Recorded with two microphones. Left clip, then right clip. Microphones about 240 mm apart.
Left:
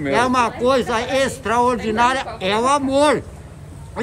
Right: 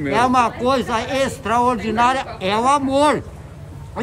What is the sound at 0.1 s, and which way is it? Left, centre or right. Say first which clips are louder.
A man's voice: right 1 dB; centre.